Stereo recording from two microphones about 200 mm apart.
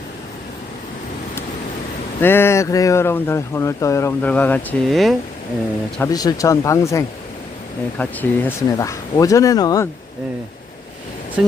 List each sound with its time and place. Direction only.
2.2 s speech: 10° left (ahead or behind)
6.0 s speech: 20° left (ahead or behind)
11.4 s speech: 5° right (ahead or behind)